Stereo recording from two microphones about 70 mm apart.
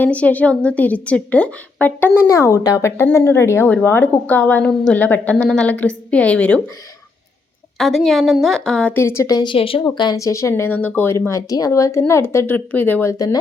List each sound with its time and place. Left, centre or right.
0.0 s a woman's voice: left
2.2 s a woman's voice: left
7.8 s a woman's voice: centre
8.9 s a woman's voice: left
9.2 s speech: left
10.2 s speech: left
10.5 s a woman's voice: left
11.3 s speech: left
12.5 s a woman's voice: left
13.1 s speech: left